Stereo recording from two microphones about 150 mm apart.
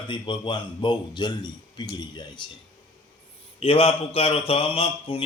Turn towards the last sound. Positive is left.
turn(degrees=35)  # may be behind; listen again after turning